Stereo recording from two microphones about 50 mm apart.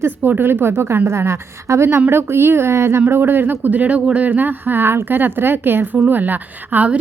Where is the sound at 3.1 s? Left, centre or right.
Right.